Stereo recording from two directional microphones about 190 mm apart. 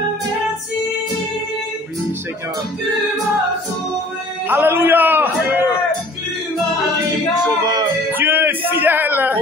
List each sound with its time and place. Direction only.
4.5 s a man's voice: 10° right (ahead or behind)
7.6 s music: 20° right (ahead or behind)
8.1 s music: 10° right (ahead or behind)